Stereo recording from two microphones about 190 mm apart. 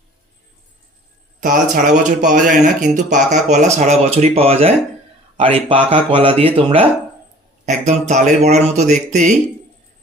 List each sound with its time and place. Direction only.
1.4 s speech: 45° right (ahead or behind)
7.6 s speech: 40° right (ahead or behind)